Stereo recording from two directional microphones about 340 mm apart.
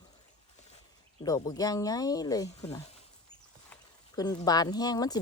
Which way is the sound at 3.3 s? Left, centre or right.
Centre.